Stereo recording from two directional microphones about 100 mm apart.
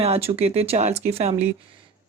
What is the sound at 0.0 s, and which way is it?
Speech, 80° right.